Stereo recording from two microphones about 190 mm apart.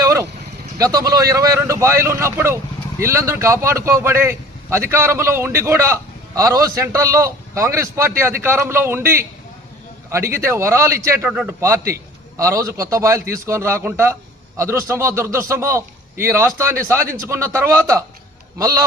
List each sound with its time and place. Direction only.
0.0 s vehicle: 15° right (ahead or behind)
0.8 s speech: 15° right (ahead or behind)